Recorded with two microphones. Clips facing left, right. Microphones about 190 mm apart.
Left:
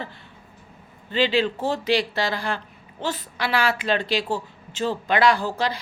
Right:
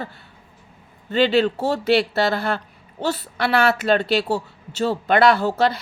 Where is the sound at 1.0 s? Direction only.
45° right (ahead or behind).